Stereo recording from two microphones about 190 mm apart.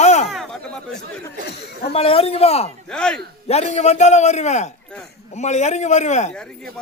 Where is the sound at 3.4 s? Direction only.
35° left (ahead or behind).